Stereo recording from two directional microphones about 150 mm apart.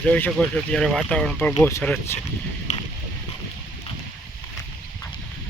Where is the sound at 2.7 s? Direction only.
50° left (ahead or behind).